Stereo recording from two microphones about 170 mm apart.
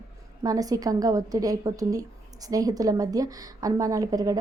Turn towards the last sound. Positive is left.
turn(degrees=-20)  # may be behind; listen again after turning